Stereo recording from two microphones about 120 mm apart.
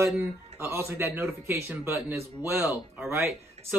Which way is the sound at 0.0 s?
20° right (ahead or behind).